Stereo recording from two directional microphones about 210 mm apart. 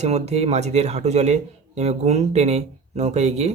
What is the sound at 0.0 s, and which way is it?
Speech, 30° right (ahead or behind).